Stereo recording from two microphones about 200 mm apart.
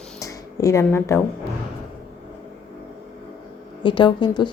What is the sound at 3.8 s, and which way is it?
Speech, 25° left (ahead or behind).